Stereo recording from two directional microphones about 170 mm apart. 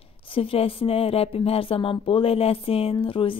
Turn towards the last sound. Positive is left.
turn(degrees=30)  # may be behind; listen again after turning